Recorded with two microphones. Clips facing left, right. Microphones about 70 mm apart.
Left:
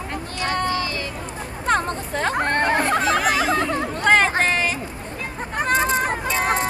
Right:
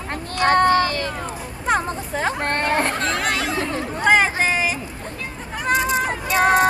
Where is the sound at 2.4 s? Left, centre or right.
Right.